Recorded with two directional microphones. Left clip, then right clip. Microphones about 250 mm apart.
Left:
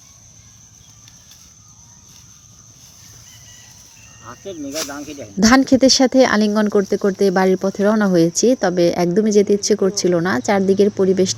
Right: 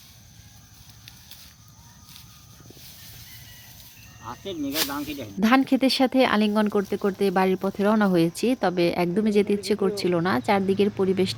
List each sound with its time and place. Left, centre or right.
4.2 s speech: right
5.4 s speech: centre